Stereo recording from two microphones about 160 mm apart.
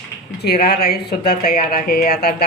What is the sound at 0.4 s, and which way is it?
Speech, 80° left.